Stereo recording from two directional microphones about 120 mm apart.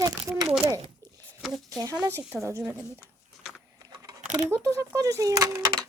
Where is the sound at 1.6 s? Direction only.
30° right (ahead or behind).